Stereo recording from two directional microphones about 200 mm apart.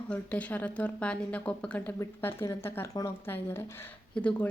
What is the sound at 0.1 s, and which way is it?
Speech, 5° left (ahead or behind).